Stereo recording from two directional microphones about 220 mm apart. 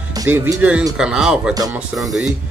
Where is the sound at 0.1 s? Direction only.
15° right (ahead or behind).